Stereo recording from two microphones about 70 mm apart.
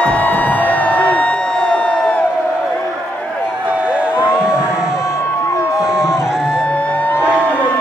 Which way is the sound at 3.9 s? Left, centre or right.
Centre.